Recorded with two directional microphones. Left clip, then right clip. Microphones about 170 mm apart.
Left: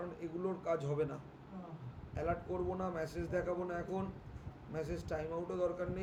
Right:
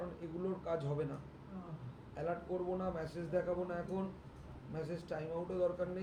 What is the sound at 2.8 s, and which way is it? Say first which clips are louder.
Speech: left 1 dB; 35° left (ahead or behind).